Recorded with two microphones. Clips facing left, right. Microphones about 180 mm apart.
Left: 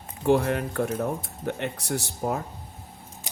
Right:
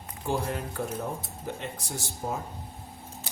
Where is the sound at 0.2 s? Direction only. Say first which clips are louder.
Left 8 dB; 70° left (ahead or behind).